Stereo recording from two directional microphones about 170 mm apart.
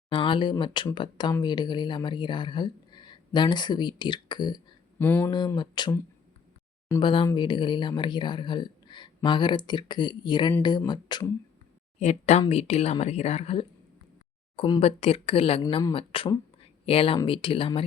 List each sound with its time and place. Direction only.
0.1 s speech: 30° left (ahead or behind)
4.9 s speech: 10° left (ahead or behind)
5.5 s speech: 25° left (ahead or behind)
7.0 s speech: 30° left (ahead or behind)
11.9 s speech: 40° left (ahead or behind)